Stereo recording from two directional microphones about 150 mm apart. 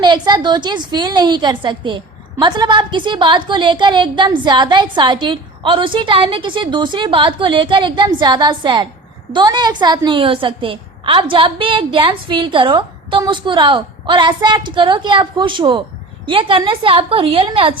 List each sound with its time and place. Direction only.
0.0 s a woman's voice: 30° right (ahead or behind)